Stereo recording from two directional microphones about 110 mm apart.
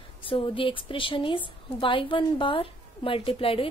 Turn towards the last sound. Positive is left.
turn(degrees=55)  # may be behind; listen again after turning